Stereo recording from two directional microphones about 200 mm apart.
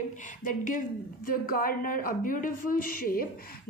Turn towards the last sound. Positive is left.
turn(degrees=45)  # may be behind; listen again after turning